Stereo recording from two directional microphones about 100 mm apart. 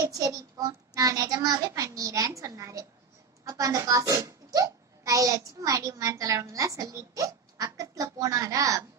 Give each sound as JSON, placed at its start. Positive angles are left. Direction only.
{"t": 0.0, "sound": "a child's voice", "side_deg": -35}